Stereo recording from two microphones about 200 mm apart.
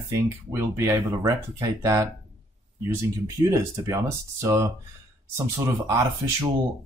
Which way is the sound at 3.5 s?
15° right (ahead or behind).